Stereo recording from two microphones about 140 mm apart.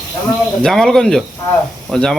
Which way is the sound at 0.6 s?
5° left (ahead or behind).